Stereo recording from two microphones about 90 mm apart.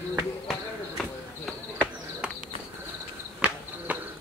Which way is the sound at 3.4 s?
15° right (ahead or behind).